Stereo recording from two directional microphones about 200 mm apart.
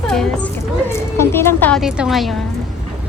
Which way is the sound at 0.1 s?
5° left (ahead or behind).